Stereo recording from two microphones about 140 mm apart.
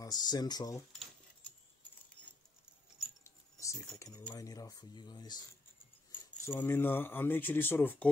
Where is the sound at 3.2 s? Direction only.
20° left (ahead or behind).